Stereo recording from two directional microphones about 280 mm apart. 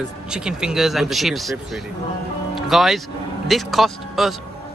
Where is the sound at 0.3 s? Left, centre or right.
Centre.